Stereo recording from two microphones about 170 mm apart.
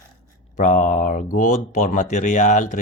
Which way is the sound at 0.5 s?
45° left (ahead or behind).